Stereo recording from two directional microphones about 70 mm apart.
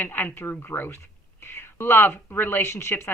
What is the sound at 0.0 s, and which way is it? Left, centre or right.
Speech, left.